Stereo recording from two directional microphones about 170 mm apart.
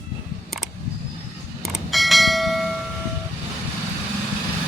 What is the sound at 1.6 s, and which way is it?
Bell, centre (ahead or behind).